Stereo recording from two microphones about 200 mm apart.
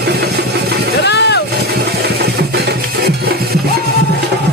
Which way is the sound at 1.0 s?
60° left (ahead or behind).